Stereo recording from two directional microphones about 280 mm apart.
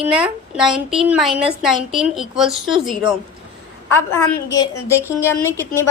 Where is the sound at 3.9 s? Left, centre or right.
Centre.